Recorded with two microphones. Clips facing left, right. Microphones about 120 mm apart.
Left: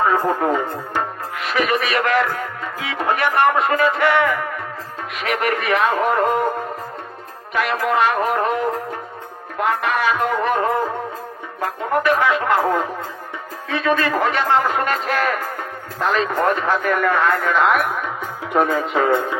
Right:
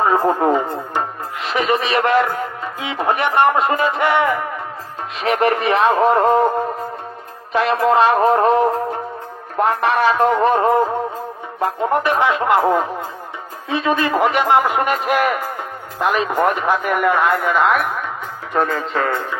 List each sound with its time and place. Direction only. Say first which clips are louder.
0.0 s speech: right 2 dB; 25° right (ahead or behind)
7.5 s speech: right 4 dB; 30° right (ahead or behind)
17.3 s speech: right 1 dB; 5° right (ahead or behind)
18.5 s speech: left 1 dB; 10° left (ahead or behind)